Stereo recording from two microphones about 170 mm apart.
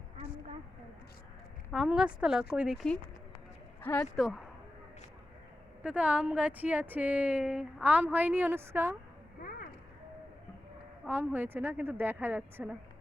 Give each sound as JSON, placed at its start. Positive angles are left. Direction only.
{"t": 1.7, "sound": "speech", "side_deg": 0}
{"t": 4.2, "sound": "speech", "side_deg": -5}
{"t": 5.8, "sound": "speech", "side_deg": -5}
{"t": 9.4, "sound": "a sound", "side_deg": 55}
{"t": 11.0, "sound": "speech", "side_deg": -10}